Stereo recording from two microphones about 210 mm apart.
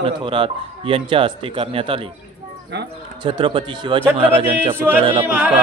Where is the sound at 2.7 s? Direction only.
55° right (ahead or behind).